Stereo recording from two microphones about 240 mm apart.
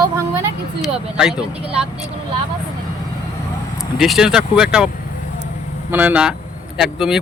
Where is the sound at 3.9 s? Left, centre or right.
Centre.